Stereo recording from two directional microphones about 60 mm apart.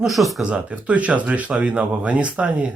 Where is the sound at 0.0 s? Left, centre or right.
Centre.